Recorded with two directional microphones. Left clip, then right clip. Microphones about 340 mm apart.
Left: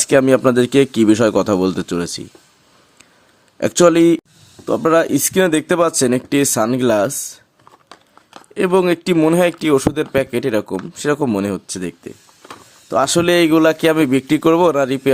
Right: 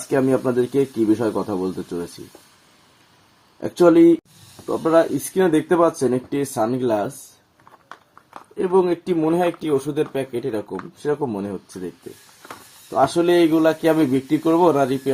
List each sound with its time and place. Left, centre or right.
0.1 s speech: left
3.6 s speech: left
8.5 s speech: left
12.9 s speech: left